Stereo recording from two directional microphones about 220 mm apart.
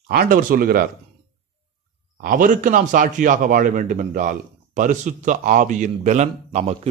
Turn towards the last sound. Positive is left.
turn(degrees=-30)  # may be behind; listen again after turning